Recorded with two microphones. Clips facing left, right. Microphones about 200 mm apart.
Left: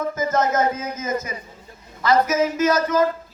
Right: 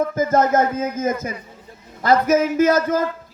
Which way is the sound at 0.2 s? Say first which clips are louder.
Right 3 dB; 55° right (ahead or behind).